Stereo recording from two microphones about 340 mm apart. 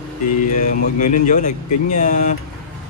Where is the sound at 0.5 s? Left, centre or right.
Left.